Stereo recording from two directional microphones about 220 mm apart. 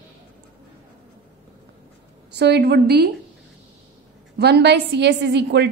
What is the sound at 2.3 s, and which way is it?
Speech, 50° right (ahead or behind).